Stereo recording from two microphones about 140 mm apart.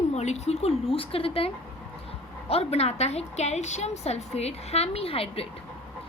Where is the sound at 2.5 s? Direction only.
45° left (ahead or behind).